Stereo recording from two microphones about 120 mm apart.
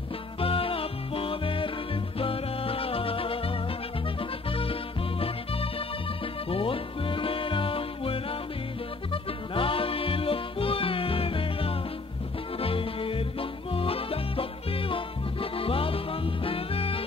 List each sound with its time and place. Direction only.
0.4 s music: 50° left (ahead or behind)